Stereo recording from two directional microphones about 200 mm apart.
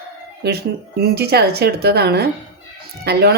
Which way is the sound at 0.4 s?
55° right (ahead or behind).